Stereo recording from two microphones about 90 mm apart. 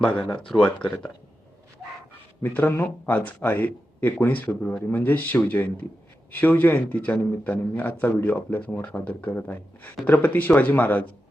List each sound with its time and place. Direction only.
0.0 s speech: 15° left (ahead or behind)
2.4 s a man's voice: 20° left (ahead or behind)